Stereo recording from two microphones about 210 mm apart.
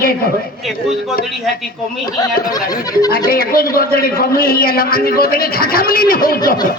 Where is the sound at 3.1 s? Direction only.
45° left (ahead or behind).